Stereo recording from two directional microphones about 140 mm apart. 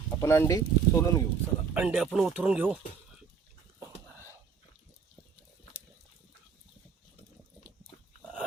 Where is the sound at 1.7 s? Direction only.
10° right (ahead or behind).